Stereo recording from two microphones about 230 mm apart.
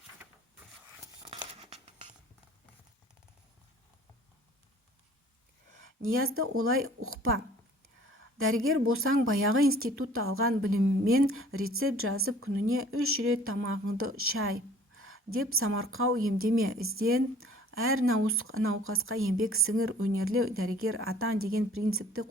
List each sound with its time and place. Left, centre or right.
1.5 s a sound: right
5.7 s a woman's voice: right
8.4 s a woman's voice: right